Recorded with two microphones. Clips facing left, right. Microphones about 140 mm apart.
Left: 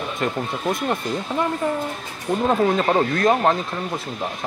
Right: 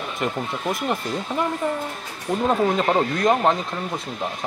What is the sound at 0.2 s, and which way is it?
Speech, centre (ahead or behind).